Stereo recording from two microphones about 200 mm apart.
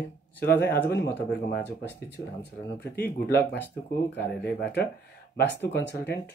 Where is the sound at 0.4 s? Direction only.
55° left (ahead or behind).